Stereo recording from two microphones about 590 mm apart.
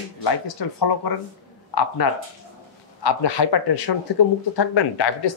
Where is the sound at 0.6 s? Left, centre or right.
Left.